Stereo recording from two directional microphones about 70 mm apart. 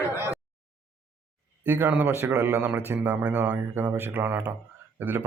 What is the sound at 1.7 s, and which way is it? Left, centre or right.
A man's voice, right.